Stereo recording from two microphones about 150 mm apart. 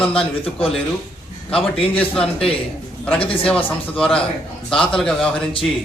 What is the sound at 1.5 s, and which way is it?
Speech, 40° left (ahead or behind).